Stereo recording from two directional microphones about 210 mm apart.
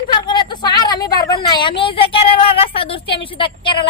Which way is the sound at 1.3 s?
20° left (ahead or behind).